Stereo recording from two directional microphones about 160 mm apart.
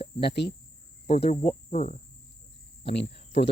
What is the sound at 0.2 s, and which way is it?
Speech, 90° left.